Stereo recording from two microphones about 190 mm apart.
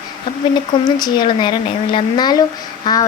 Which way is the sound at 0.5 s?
20° left (ahead or behind).